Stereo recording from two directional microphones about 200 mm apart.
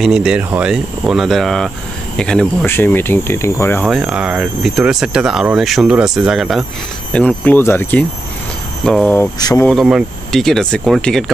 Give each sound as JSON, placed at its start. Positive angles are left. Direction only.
{"t": 0.0, "sound": "speech", "side_deg": -5}
{"t": 3.8, "sound": "speech", "side_deg": -5}
{"t": 9.4, "sound": "speech", "side_deg": 20}
{"t": 9.7, "sound": "speech", "side_deg": 0}